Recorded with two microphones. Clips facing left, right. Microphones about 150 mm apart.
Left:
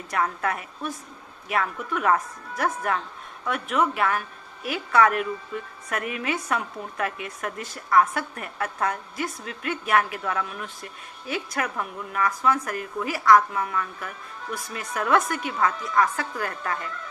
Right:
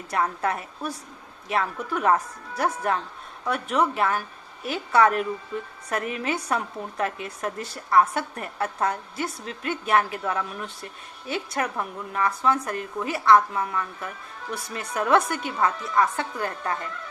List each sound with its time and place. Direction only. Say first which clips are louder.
0.1 s a woman's voice: right 1 dB; 30° right (ahead or behind)